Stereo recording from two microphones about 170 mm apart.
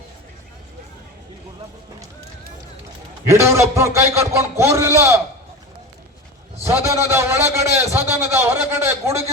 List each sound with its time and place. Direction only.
3.2 s a man's voice: 15° right (ahead or behind)
6.6 s a man's voice: 15° right (ahead or behind)